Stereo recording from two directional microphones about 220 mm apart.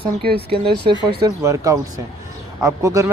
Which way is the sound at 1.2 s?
15° right (ahead or behind).